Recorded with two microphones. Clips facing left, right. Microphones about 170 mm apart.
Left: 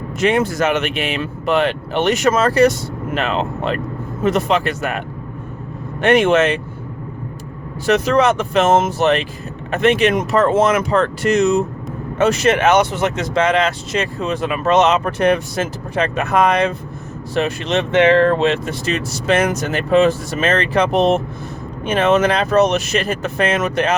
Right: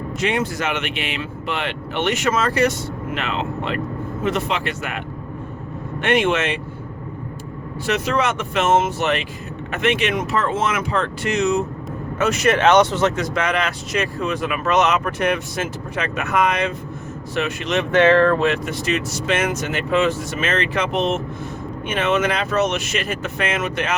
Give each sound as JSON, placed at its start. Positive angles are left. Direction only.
{"t": 0.2, "sound": "speech", "side_deg": 45}
{"t": 7.9, "sound": "speech", "side_deg": 40}
{"t": 12.2, "sound": "speech", "side_deg": 30}
{"t": 12.5, "sound": "speech", "side_deg": 10}
{"t": 13.2, "sound": "speech", "side_deg": 25}